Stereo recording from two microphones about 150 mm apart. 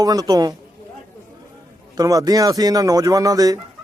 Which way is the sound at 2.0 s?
25° right (ahead or behind).